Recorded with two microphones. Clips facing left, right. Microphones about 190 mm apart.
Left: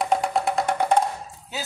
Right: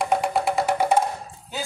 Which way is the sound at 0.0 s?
Centre (ahead or behind).